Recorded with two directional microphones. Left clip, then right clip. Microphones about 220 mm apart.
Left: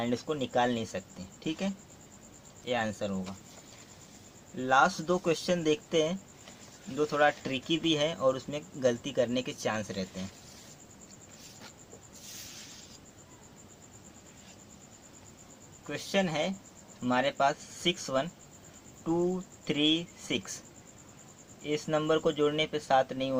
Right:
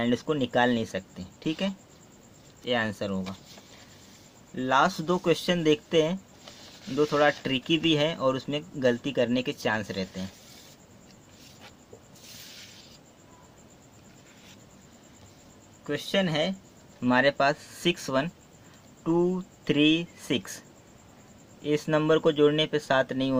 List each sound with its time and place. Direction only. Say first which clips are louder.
0.0 s speech: right 5 dB; 40° right (ahead or behind)
4.5 s speech: right 1 dB; 35° right (ahead or behind)
15.9 s speech: right 4 dB; 40° right (ahead or behind)
19.6 s speech: right 5 dB; 40° right (ahead or behind)
21.6 s speech: right 5 dB; 40° right (ahead or behind)